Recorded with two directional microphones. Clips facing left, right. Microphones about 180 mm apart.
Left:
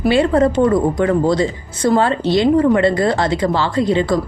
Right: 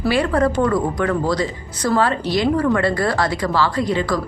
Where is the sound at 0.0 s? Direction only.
25° left (ahead or behind).